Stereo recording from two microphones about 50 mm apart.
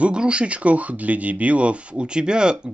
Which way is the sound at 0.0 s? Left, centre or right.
Right.